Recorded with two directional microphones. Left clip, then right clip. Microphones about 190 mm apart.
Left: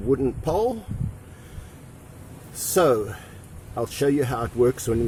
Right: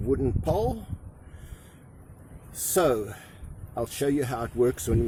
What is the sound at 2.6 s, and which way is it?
Speech, 30° right (ahead or behind).